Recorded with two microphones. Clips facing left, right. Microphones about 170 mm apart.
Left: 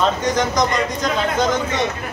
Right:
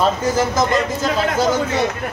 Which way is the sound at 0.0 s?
5° right (ahead or behind).